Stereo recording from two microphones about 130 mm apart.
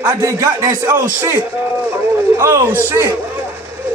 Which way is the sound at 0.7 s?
20° right (ahead or behind).